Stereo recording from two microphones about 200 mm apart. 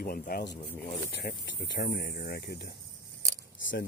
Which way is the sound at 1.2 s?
60° left (ahead or behind).